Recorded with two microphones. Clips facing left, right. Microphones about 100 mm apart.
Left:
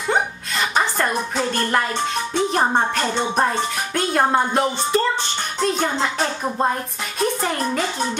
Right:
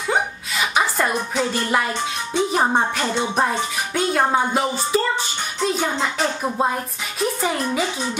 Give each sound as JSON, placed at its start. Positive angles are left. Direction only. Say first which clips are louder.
{"t": 0.1, "sound": "music", "louder": "left 1 dB", "side_deg": -5}